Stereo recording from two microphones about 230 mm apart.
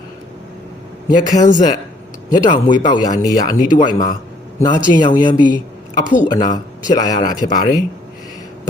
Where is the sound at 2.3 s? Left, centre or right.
Centre.